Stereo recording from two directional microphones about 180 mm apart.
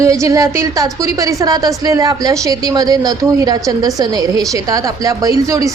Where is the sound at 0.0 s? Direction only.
15° right (ahead or behind).